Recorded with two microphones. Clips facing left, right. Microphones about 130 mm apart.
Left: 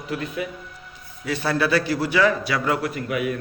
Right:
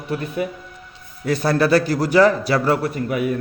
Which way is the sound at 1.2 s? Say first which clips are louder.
Right 5 dB; 40° right (ahead or behind).